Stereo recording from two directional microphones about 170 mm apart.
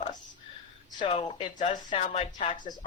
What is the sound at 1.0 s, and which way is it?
Speech, 30° left (ahead or behind).